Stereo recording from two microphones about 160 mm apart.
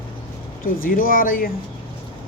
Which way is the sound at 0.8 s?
60° left (ahead or behind).